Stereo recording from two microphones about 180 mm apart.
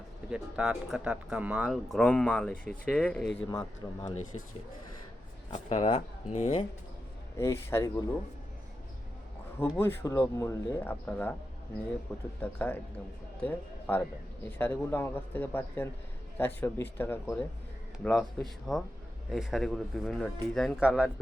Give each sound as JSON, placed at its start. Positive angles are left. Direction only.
{"t": 0.3, "sound": "speech", "side_deg": -5}
{"t": 3.5, "sound": "a man's voice", "side_deg": 20}
{"t": 5.5, "sound": "speech", "side_deg": 35}
{"t": 7.3, "sound": "speech", "side_deg": 15}
{"t": 9.6, "sound": "speech", "side_deg": 10}
{"t": 12.4, "sound": "speech", "side_deg": 10}